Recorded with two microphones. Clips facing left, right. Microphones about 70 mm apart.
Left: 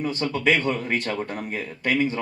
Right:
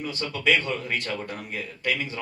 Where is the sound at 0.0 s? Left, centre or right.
Left.